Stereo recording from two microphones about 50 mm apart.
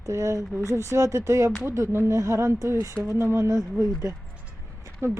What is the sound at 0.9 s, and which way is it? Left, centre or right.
Speech, right.